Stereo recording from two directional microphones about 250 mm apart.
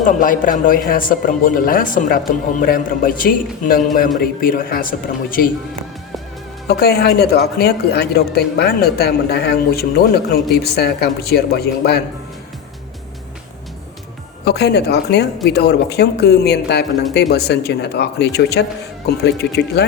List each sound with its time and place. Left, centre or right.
0.0 s speech: left
6.7 s speech: left
14.4 s speech: left